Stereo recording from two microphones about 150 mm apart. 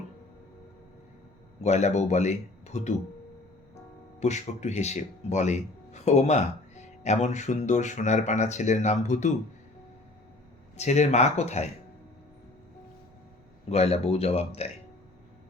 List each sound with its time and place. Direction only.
1.6 s speech: 50° left (ahead or behind)
4.2 s speech: 50° left (ahead or behind)
10.8 s speech: 50° left (ahead or behind)
13.7 s speech: 45° left (ahead or behind)